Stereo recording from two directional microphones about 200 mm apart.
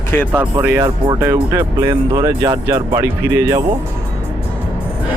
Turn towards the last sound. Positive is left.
turn(degrees=-15)  # may be behind; listen again after turning